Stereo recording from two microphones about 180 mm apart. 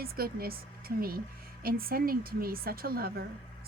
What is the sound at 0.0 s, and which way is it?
Speech, 55° right (ahead or behind).